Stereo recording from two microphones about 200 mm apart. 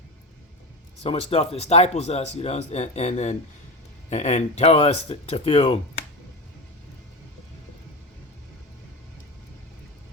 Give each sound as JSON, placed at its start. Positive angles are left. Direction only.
{"t": 1.0, "sound": "speech", "side_deg": 30}